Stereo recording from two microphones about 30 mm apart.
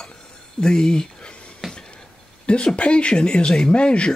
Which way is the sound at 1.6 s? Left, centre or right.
Centre.